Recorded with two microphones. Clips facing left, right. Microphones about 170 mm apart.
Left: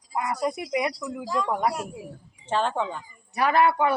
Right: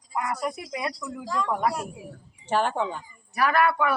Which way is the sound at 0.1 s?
25° left (ahead or behind).